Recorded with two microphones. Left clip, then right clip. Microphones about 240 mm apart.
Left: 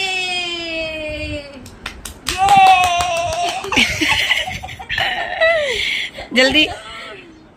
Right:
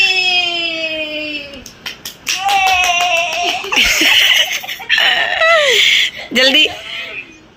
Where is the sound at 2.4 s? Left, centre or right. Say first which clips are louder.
Left 3 dB; left.